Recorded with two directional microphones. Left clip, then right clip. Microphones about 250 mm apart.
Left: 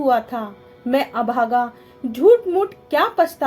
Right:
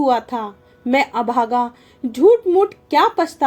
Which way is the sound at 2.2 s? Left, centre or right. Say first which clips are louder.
Right 1 dB; right.